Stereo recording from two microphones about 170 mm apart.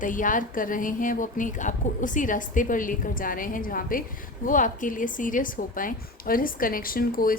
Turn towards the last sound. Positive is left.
turn(degrees=55)  # may be behind; listen again after turning